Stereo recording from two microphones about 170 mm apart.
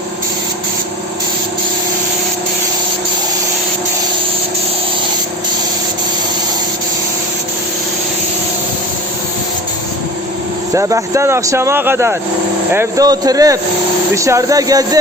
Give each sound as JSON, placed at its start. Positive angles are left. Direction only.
{"t": 10.8, "sound": "speech", "side_deg": -20}